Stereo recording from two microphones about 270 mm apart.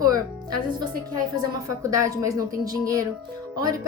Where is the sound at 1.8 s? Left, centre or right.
Centre.